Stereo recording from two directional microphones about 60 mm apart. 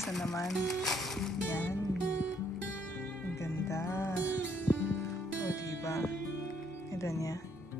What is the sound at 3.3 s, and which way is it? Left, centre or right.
Music, left.